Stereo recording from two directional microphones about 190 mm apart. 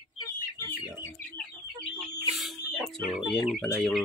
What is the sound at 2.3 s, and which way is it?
Bird, centre (ahead or behind).